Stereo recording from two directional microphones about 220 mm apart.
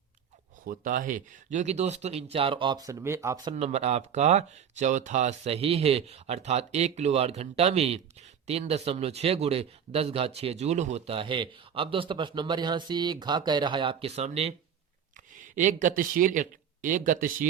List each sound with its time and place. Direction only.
0.6 s speech: 40° right (ahead or behind); by 3.5 s 15° right (ahead or behind)
3.5 s speech: 30° right (ahead or behind)